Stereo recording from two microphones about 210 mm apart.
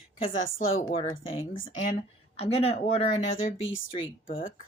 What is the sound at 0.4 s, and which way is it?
Speech, 70° left (ahead or behind).